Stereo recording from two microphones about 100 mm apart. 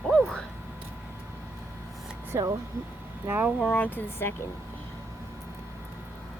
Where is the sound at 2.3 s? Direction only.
30° right (ahead or behind).